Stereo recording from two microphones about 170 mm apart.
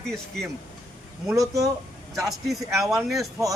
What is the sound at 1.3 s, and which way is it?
Speech, 20° right (ahead or behind).